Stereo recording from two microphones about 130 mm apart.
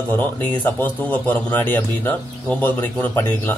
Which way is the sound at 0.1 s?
15° left (ahead or behind).